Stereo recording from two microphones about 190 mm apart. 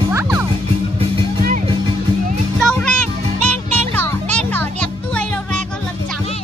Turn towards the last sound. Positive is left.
turn(degrees=5)  # may be behind; listen again after turning